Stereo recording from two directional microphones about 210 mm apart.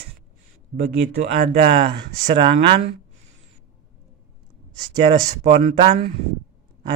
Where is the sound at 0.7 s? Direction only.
45° right (ahead or behind).